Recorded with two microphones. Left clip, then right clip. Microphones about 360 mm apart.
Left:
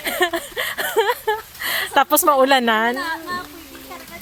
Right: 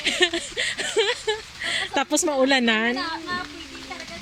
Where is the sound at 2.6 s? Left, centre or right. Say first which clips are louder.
Left 4 dB; left.